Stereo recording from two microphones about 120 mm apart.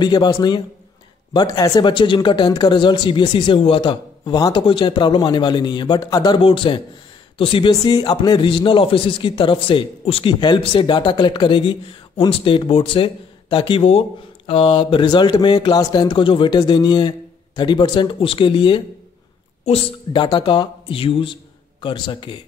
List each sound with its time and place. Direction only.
0.0 s speech: 35° left (ahead or behind)
6.4 s speech: 45° left (ahead or behind)